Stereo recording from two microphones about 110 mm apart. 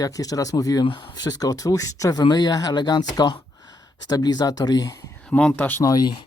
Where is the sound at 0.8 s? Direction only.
50° left (ahead or behind).